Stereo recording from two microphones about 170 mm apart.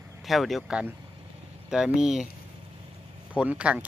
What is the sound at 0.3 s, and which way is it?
Speech, centre (ahead or behind).